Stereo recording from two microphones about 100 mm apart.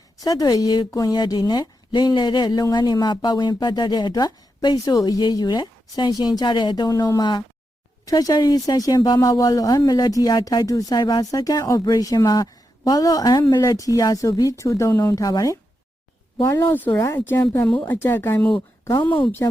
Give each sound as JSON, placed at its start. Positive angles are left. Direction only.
{"t": 0.2, "sound": "a woman's voice", "side_deg": 40}
{"t": 16.5, "sound": "a woman's voice", "side_deg": 25}
{"t": 16.9, "sound": "a woman's voice", "side_deg": 35}
{"t": 17.2, "sound": "a woman's voice", "side_deg": 20}